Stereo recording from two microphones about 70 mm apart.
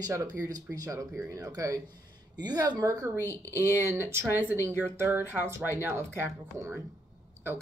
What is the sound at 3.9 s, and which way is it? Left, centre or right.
Speech, right.